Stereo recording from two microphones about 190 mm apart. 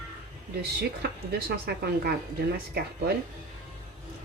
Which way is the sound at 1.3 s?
55° right (ahead or behind).